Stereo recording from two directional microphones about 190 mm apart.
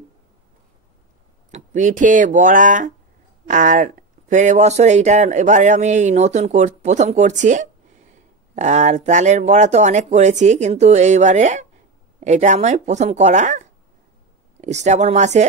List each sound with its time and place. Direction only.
1.5 s speech: 40° right (ahead or behind)